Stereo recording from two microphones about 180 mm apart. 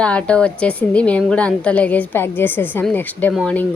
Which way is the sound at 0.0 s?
5° left (ahead or behind).